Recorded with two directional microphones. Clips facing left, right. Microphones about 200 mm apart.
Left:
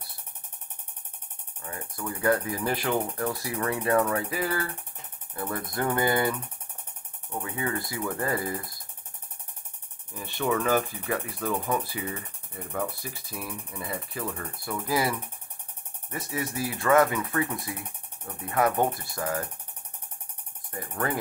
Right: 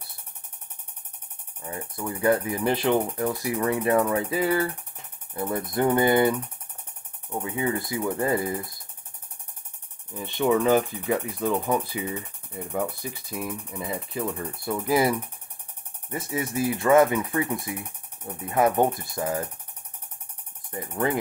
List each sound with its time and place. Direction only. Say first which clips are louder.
1.6 s speech: right 3 dB; 25° right (ahead or behind)
7.4 s speech: right 4 dB; 20° right (ahead or behind)
10.1 s speech: right 5 dB; 20° right (ahead or behind)
20.9 s speech: right 4 dB; 20° right (ahead or behind)